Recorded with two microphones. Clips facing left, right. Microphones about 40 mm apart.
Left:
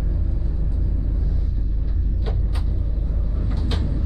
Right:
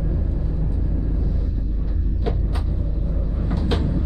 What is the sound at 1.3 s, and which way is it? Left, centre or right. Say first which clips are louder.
Vehicle: right 3 dB; centre.